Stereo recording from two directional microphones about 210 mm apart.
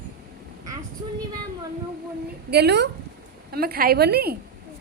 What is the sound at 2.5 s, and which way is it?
A woman's voice, 50° right (ahead or behind).